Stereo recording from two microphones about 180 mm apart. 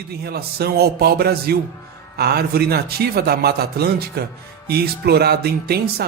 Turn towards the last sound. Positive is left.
turn(degrees=-60)  # may be behind; listen again after turning